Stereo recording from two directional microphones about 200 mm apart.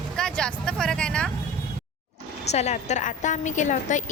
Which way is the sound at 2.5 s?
35° left (ahead or behind).